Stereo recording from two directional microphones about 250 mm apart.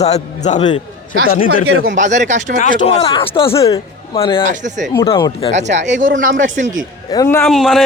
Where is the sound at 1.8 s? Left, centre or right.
Right.